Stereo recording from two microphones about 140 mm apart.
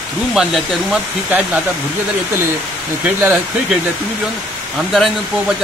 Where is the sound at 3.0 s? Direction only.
15° right (ahead or behind).